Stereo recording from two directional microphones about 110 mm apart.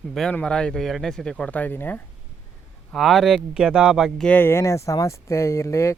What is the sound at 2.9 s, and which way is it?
Speech, centre (ahead or behind).